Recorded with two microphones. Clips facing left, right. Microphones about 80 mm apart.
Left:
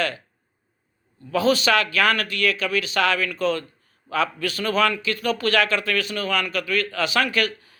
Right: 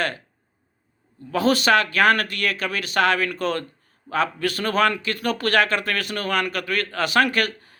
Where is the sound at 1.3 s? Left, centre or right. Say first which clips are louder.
Right 1 dB; right.